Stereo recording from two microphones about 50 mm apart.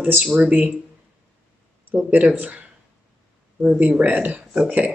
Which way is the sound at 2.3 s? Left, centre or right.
Right.